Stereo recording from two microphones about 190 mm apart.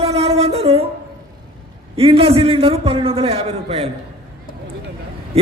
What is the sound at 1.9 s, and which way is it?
A man's voice, 30° right (ahead or behind).